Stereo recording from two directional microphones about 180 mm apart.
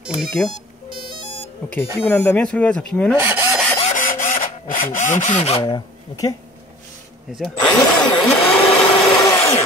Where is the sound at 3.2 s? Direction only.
15° right (ahead or behind).